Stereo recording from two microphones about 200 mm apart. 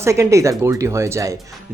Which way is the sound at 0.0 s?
15° right (ahead or behind).